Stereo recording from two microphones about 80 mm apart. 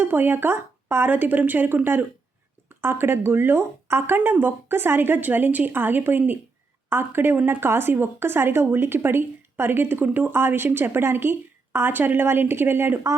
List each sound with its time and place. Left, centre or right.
0.0 s speech: right